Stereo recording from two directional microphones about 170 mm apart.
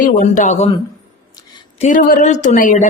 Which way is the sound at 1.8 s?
50° left (ahead or behind).